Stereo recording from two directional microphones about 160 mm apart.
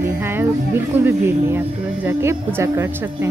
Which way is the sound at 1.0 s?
15° right (ahead or behind).